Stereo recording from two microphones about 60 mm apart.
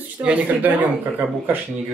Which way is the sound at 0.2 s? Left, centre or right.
Right.